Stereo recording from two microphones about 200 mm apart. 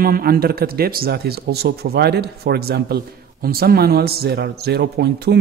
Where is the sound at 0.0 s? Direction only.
45° right (ahead or behind).